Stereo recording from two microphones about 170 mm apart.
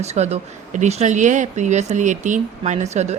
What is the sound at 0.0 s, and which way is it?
Speech, 40° right (ahead or behind).